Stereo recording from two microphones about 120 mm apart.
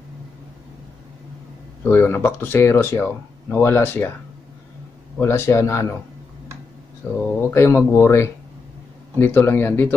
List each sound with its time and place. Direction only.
1.9 s speech: 20° left (ahead or behind)
5.2 s speech: 20° left (ahead or behind)
7.0 s speech: 10° left (ahead or behind)